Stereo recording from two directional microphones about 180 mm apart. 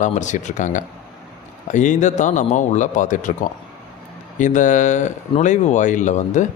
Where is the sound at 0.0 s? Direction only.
40° left (ahead or behind).